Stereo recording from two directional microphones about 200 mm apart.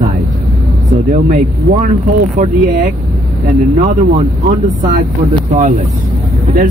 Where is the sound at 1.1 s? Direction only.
40° right (ahead or behind).